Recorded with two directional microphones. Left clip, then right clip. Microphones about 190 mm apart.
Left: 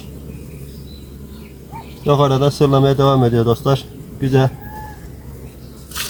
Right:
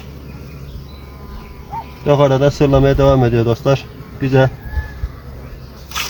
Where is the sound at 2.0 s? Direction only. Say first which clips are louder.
Right 3 dB; 20° right (ahead or behind).